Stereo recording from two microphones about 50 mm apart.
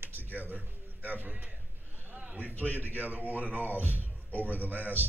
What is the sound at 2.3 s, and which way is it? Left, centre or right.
A man's voice, right.